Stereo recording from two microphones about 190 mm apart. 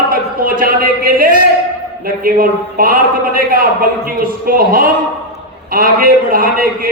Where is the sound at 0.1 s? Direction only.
50° right (ahead or behind).